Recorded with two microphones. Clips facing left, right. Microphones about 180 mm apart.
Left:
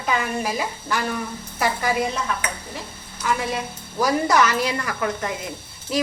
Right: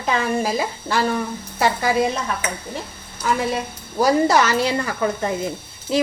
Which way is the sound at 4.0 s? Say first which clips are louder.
Right 3 dB; 30° right (ahead or behind).